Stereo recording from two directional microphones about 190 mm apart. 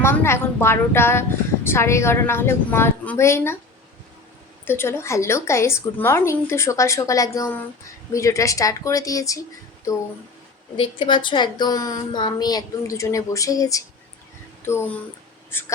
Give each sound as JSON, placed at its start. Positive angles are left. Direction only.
{"t": 0.0, "sound": "a woman's voice", "side_deg": 15}
{"t": 4.6, "sound": "a woman's voice", "side_deg": 10}
{"t": 10.8, "sound": "a woman's voice", "side_deg": 25}